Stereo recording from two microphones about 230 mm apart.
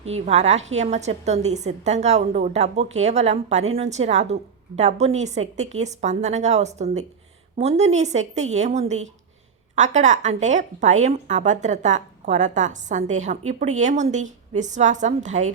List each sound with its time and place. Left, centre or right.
0.0 s a woman's voice: right